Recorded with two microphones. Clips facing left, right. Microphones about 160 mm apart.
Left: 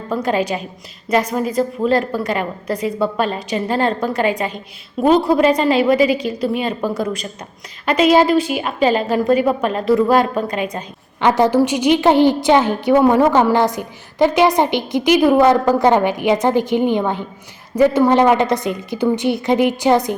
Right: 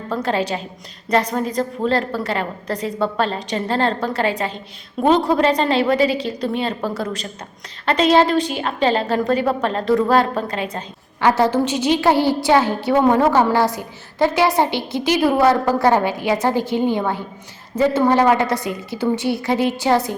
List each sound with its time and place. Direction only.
0.1 s a woman's voice: 15° left (ahead or behind)
5.0 s a woman's voice: 5° left (ahead or behind)